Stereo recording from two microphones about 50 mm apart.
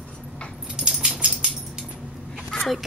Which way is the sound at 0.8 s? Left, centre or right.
Centre.